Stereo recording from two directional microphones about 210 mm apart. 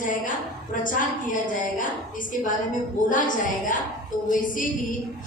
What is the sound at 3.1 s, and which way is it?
A woman's voice, 40° left (ahead or behind).